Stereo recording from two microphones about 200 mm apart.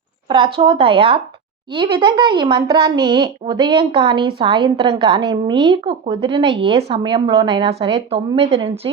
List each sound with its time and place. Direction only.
0.3 s a woman's voice: 25° right (ahead or behind)